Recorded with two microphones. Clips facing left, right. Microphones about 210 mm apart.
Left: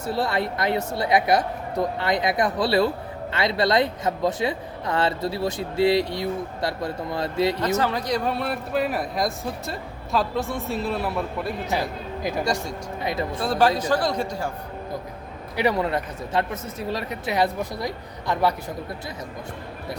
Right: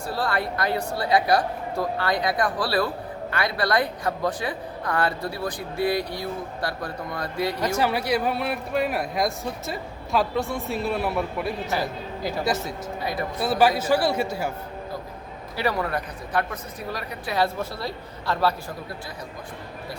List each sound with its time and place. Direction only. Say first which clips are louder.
0.0 s speech: left 2 dB; 20° left (ahead or behind)
7.8 s speech: right 1 dB; 10° right (ahead or behind)
13.0 s speech: left 3 dB; 25° left (ahead or behind)
13.4 s a man's voice: right 1 dB; 5° right (ahead or behind)
15.5 s speech: left 3 dB; 20° left (ahead or behind)